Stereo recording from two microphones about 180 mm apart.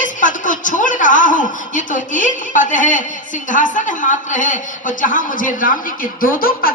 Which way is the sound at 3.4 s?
45° left (ahead or behind).